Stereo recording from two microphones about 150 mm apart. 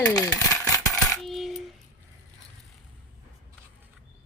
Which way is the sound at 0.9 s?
5° left (ahead or behind).